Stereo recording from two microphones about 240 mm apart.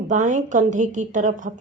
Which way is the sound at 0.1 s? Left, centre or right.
Right.